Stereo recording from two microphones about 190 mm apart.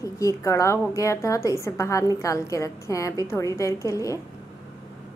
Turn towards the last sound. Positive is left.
turn(degrees=15)  # may be behind; listen again after turning